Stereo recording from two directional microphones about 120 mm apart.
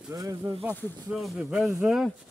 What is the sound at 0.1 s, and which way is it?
Speech, 30° right (ahead or behind).